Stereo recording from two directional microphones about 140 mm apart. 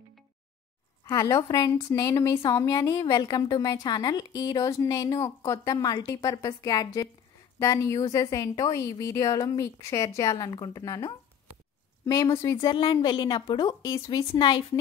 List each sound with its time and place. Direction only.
1.0 s a woman's voice: 25° left (ahead or behind)